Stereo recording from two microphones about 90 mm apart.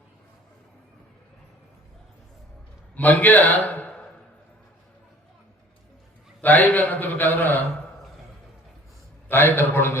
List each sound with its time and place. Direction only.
2.9 s a man's voice: 20° left (ahead or behind)
6.4 s a man's voice: 20° left (ahead or behind)
9.3 s a man's voice: 20° left (ahead or behind)